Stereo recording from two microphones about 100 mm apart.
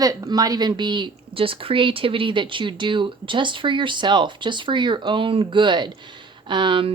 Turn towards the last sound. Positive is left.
turn(degrees=-60)  # may be behind; listen again after turning